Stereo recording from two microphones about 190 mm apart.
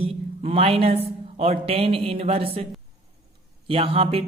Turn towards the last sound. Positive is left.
turn(degrees=-30)  # may be behind; listen again after turning